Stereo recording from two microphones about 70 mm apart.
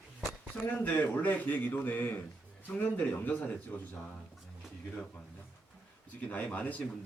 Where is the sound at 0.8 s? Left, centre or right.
Left.